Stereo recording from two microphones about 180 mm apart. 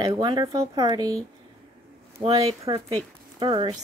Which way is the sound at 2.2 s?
30° right (ahead or behind).